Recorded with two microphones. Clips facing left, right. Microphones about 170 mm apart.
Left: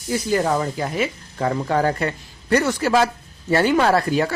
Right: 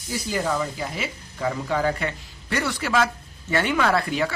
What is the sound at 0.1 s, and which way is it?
Speech, 50° left (ahead or behind).